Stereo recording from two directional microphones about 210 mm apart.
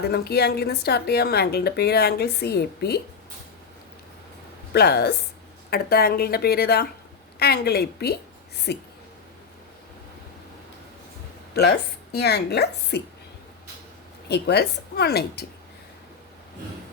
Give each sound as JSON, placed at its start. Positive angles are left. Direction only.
{"t": 0.0, "sound": "a woman's voice", "side_deg": 50}
{"t": 4.7, "sound": "a woman's voice", "side_deg": 50}
{"t": 11.6, "sound": "a woman's voice", "side_deg": 50}
{"t": 14.3, "sound": "a woman's voice", "side_deg": 50}